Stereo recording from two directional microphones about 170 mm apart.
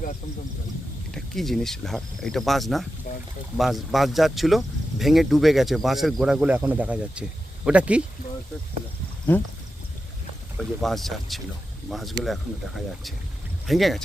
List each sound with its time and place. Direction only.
1.1 s speech: centre (ahead or behind)
3.1 s speech: 45° left (ahead or behind)
3.6 s speech: centre (ahead or behind)
9.3 s speech: 10° left (ahead or behind)
10.6 s speech: centre (ahead or behind)
13.7 s speech: centre (ahead or behind)